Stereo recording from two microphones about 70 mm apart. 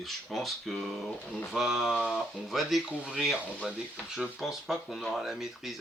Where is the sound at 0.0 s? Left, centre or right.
Centre.